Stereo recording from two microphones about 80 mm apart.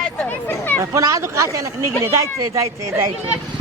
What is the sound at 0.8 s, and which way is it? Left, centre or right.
Speech, right.